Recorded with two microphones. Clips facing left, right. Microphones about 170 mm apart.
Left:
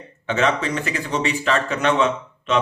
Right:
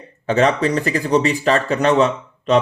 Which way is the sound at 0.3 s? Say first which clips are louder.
Right 5 dB; 35° right (ahead or behind).